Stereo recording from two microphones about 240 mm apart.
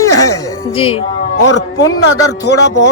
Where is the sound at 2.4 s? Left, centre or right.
Left.